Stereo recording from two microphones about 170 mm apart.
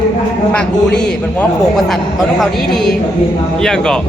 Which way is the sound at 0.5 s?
5° left (ahead or behind).